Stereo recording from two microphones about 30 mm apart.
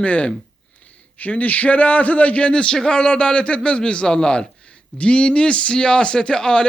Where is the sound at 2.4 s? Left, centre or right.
Left.